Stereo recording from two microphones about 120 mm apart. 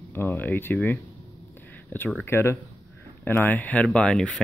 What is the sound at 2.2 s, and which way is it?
Speech, 20° left (ahead or behind).